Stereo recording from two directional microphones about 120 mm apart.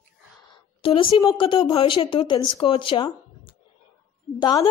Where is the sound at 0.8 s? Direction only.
45° left (ahead or behind).